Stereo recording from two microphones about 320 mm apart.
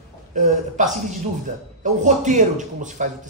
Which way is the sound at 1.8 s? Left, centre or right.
Right.